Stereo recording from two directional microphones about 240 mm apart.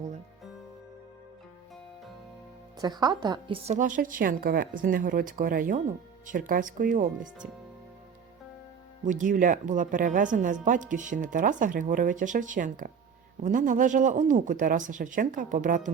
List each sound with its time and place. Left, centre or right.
2.7 s speech: centre; by 7.4 s right
9.0 s speech: right